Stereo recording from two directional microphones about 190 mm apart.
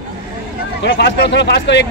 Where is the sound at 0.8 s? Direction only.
65° left (ahead or behind).